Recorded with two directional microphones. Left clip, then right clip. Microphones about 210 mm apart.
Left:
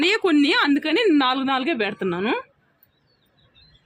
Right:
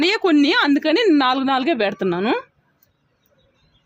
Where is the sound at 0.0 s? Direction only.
45° right (ahead or behind).